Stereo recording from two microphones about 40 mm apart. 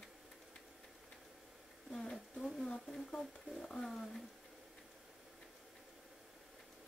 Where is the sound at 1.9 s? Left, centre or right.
Centre.